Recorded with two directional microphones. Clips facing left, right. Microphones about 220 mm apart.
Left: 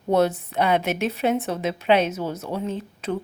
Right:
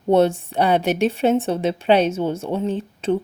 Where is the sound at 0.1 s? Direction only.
30° right (ahead or behind).